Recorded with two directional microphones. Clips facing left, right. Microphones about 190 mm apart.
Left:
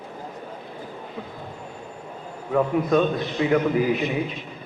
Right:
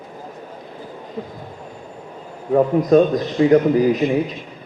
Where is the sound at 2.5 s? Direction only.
40° right (ahead or behind).